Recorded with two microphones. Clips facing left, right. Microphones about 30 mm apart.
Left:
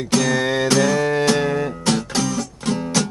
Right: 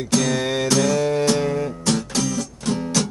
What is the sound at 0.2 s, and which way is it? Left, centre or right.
Music, centre.